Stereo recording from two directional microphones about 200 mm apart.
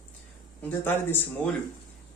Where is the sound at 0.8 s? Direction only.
10° left (ahead or behind).